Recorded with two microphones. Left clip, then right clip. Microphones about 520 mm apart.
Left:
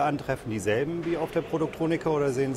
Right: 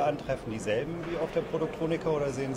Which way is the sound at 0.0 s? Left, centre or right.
Left.